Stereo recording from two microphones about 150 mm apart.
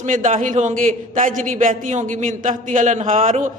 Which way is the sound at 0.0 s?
60° right (ahead or behind).